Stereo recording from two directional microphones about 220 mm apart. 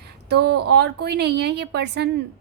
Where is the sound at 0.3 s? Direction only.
50° right (ahead or behind).